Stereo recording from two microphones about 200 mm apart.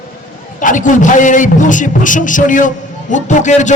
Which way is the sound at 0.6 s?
40° left (ahead or behind).